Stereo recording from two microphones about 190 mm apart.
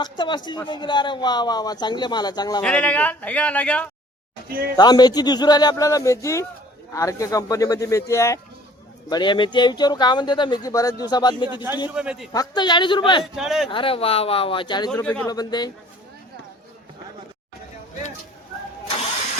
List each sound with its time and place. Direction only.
0.0 s speech: 25° left (ahead or behind)
2.6 s speech: 5° left (ahead or behind)
4.8 s speech: 20° left (ahead or behind)
11.9 s a man's voice: 5° right (ahead or behind)
12.3 s speech: 20° left (ahead or behind)
13.2 s a man's voice: centre (ahead or behind)
13.7 s speech: 25° left (ahead or behind)
15.0 s speech: 5° left (ahead or behind)
15.3 s speech: 20° left (ahead or behind)